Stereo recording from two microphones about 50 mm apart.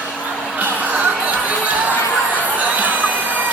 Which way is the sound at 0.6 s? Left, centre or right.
Right.